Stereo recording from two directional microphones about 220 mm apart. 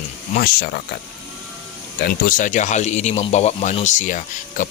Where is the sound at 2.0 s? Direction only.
40° left (ahead or behind).